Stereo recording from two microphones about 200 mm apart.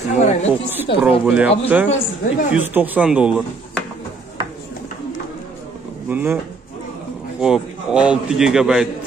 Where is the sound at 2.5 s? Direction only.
10° right (ahead or behind).